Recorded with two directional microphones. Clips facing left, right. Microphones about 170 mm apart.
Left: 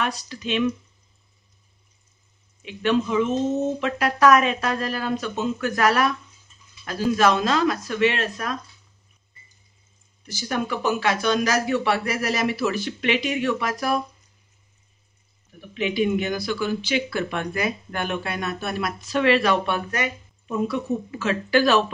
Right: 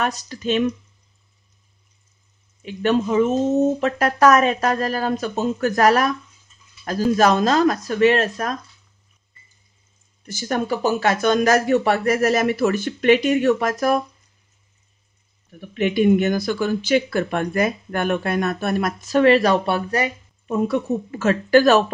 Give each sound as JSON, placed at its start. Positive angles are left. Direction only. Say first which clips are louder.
{"t": 0.0, "sound": "speech", "louder": "right 4 dB", "side_deg": -45}
{"t": 2.6, "sound": "speech", "louder": "right 2 dB", "side_deg": -40}
{"t": 10.2, "sound": "speech", "louder": "right 3 dB", "side_deg": -45}
{"t": 15.7, "sound": "speech", "louder": "right 6 dB", "side_deg": -50}